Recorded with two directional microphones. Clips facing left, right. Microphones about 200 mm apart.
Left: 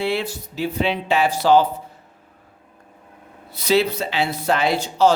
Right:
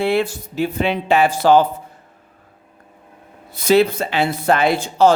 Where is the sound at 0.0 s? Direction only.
50° right (ahead or behind).